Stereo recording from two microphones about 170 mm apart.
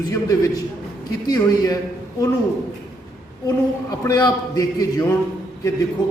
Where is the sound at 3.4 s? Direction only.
20° left (ahead or behind).